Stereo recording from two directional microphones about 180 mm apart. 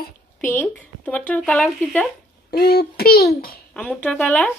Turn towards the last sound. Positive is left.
turn(degrees=10)  # may be behind; listen again after turning